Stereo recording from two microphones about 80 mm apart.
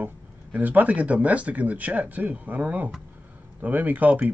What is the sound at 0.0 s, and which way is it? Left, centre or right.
Speech, right.